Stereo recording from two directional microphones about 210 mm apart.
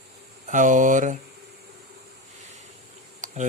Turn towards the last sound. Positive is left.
turn(degrees=-35)  # may be behind; listen again after turning